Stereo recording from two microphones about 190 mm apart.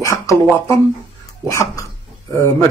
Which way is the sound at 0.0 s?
15° left (ahead or behind).